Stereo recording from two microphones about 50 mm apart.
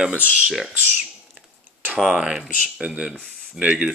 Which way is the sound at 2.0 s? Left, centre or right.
Centre.